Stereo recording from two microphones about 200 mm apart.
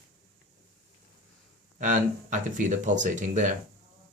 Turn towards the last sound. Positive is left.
turn(degrees=-40)  # may be behind; listen again after turning